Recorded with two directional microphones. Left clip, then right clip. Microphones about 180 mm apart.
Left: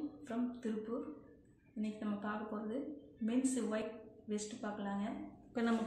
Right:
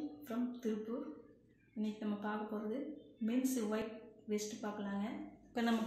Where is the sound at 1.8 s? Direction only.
Centre (ahead or behind).